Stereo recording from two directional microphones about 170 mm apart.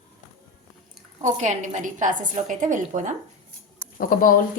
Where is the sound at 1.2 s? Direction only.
50° right (ahead or behind).